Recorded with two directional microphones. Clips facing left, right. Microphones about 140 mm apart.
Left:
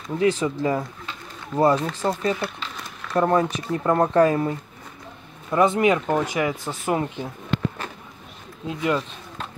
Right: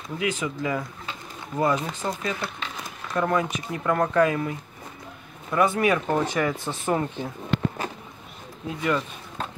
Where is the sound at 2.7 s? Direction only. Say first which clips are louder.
Even; 15° right (ahead or behind).